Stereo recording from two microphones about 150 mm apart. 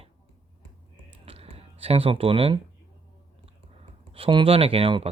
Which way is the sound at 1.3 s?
40° right (ahead or behind).